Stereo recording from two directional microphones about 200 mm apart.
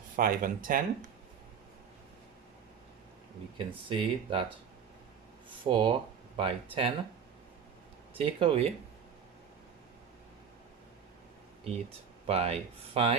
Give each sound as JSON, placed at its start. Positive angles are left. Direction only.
{"t": 0.2, "sound": "speech", "side_deg": -45}
{"t": 3.7, "sound": "speech", "side_deg": -25}
{"t": 5.6, "sound": "speech", "side_deg": -25}
{"t": 8.2, "sound": "speech", "side_deg": -30}
{"t": 12.2, "sound": "speech", "side_deg": -30}